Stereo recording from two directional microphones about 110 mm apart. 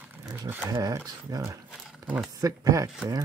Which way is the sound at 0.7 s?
30° right (ahead or behind).